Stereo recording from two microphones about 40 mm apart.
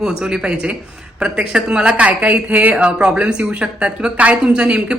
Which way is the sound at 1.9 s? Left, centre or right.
Right.